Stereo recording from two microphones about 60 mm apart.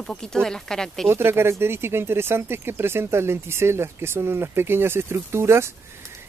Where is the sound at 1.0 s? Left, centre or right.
Right.